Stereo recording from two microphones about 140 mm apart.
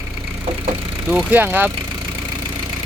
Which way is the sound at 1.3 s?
15° right (ahead or behind).